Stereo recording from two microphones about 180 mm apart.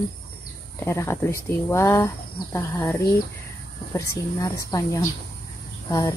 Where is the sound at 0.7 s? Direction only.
15° left (ahead or behind).